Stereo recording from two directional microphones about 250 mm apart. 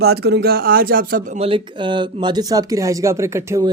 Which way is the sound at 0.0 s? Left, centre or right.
Right.